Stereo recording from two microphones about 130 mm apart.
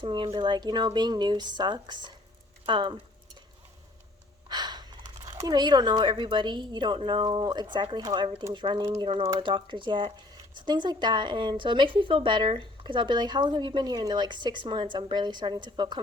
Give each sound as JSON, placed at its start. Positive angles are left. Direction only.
{"t": 0.0, "sound": "speech", "side_deg": -40}
{"t": 4.4, "sound": "speech", "side_deg": -35}